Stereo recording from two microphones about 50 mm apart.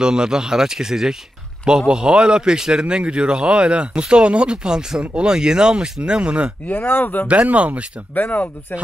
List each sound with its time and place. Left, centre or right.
0.0 s speech: centre
6.7 s speech: left
7.2 s speech: right
8.1 s speech: left